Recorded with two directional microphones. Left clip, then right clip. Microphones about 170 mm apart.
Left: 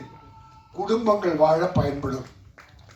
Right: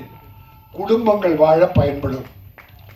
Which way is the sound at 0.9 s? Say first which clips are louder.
Right 6 dB; 10° right (ahead or behind).